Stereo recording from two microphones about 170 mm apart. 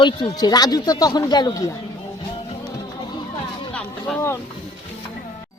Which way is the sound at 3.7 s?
10° left (ahead or behind).